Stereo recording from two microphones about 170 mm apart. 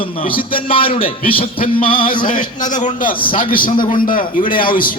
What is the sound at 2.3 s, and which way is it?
A man's voice, 50° left (ahead or behind).